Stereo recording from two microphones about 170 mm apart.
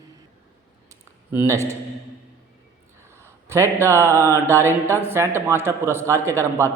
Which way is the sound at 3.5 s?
15° right (ahead or behind).